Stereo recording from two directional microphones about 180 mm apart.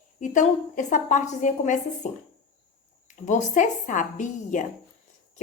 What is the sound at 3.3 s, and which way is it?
A woman's voice, 40° left (ahead or behind).